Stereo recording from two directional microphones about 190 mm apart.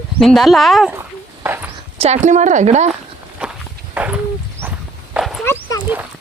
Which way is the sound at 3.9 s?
5° right (ahead or behind).